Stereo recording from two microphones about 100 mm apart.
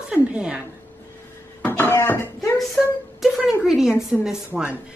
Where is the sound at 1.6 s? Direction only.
20° left (ahead or behind).